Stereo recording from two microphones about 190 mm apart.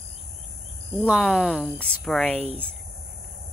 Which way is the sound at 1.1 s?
Centre (ahead or behind).